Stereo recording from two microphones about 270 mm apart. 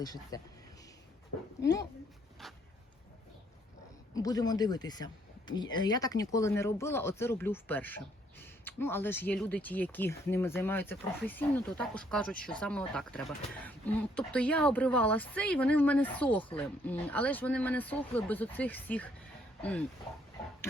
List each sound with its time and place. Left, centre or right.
0.0 s speech: centre
1.6 s speech: left
2.4 s a sound: centre
4.1 s speech: centre